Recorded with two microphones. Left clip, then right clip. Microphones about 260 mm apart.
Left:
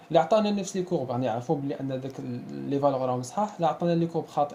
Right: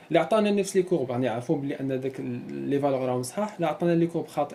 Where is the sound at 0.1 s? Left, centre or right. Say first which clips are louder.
Even; left.